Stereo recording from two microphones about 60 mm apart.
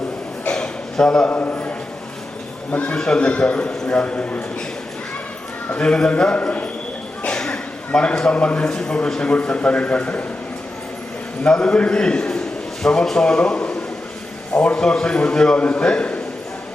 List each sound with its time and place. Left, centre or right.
0.4 s a sound: centre
1.3 s a man's voice: left
2.7 s a man's voice: centre
5.7 s a man's voice: centre
7.2 s a sound: centre
7.9 s a man's voice: centre
11.4 s a man's voice: centre